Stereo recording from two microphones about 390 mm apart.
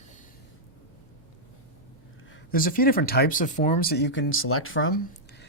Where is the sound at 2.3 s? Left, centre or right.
Left.